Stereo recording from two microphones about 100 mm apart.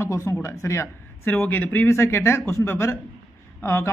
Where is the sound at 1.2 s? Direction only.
20° left (ahead or behind).